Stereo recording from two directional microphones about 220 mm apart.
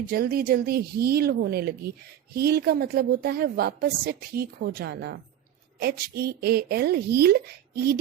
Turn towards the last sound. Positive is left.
turn(degrees=-45)  # may be behind; listen again after turning